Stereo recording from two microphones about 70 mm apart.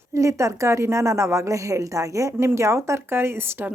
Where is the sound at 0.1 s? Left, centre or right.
Right.